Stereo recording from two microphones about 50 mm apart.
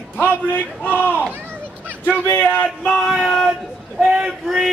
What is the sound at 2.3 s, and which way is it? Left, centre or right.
Speech, left.